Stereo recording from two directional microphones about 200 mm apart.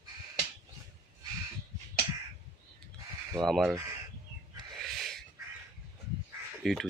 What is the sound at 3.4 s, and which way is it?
Speech, centre (ahead or behind).